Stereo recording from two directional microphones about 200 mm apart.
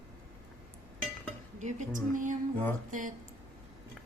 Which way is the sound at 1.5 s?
35° right (ahead or behind).